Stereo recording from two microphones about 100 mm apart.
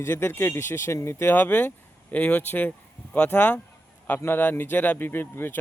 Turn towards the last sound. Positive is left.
turn(degrees=20)  # may be behind; listen again after turning